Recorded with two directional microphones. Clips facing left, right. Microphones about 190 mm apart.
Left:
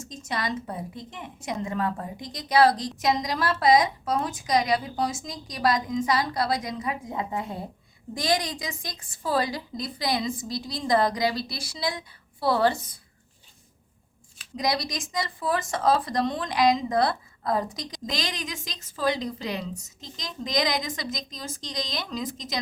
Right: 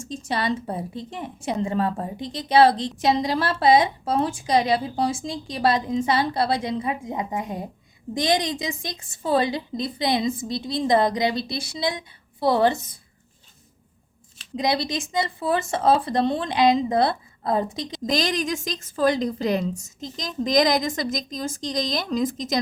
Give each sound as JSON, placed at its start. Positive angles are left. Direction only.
{"t": 0.0, "sound": "a woman's voice", "side_deg": -30}
{"t": 14.5, "sound": "a woman's voice", "side_deg": -25}
{"t": 18.0, "sound": "a woman's voice", "side_deg": -45}